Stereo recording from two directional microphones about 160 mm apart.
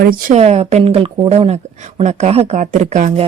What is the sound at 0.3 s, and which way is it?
Speech, 40° right (ahead or behind).